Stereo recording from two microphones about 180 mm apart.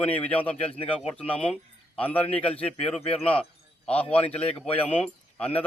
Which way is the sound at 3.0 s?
35° left (ahead or behind).